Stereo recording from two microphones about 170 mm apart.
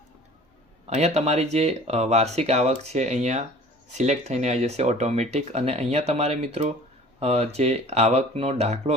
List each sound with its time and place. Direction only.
0.9 s speech: 40° right (ahead or behind)